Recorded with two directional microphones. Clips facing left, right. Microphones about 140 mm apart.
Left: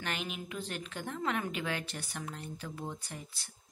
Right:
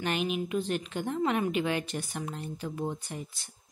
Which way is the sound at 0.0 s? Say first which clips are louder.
Right 9 dB; 20° right (ahead or behind).